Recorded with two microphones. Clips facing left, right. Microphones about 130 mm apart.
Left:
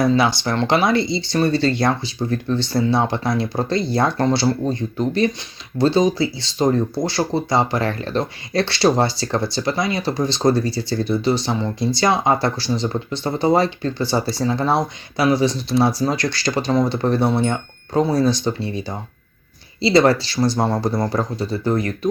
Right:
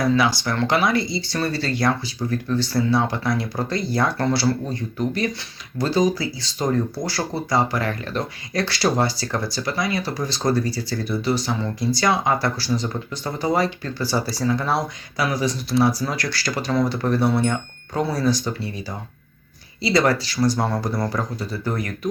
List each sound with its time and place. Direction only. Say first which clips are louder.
0.0 s speech: left 3 dB; 25° left (ahead or behind)